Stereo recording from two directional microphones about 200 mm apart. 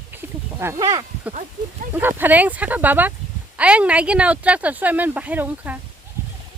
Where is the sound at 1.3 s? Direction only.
35° right (ahead or behind).